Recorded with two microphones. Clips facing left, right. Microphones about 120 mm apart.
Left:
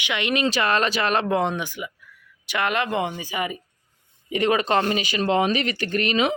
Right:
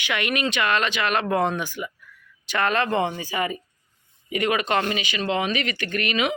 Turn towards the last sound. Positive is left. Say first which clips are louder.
# left 3 dB
turn(degrees=35)  # may be behind; listen again after turning